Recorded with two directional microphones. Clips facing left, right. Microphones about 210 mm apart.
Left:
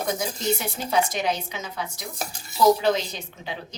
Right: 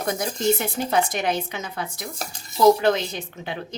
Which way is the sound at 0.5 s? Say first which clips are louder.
Right 2 dB; 55° right (ahead or behind).